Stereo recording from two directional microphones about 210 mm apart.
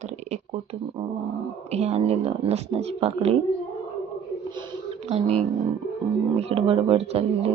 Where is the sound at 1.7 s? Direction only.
30° right (ahead or behind).